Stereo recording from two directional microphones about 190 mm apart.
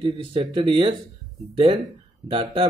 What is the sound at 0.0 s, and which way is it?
Speech, 30° right (ahead or behind).